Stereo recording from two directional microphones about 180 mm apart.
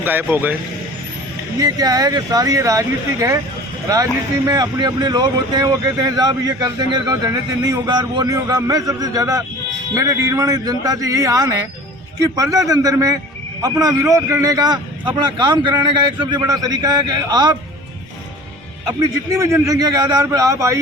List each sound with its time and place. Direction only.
0.0 s a man's voice: 10° right (ahead or behind)
1.5 s speech: 20° right (ahead or behind)
18.9 s a man's voice: 15° right (ahead or behind)